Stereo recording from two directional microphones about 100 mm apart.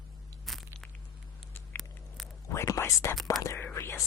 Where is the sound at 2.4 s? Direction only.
30° left (ahead or behind).